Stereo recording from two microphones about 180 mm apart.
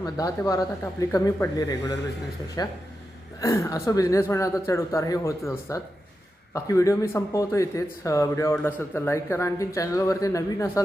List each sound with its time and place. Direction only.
0.0 s a woman's voice: 20° left (ahead or behind)